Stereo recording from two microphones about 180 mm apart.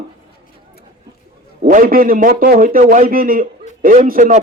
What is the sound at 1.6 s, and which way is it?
A man's voice, 50° right (ahead or behind).